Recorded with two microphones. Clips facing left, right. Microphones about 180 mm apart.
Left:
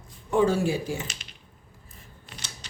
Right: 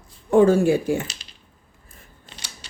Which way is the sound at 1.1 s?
35° right (ahead or behind).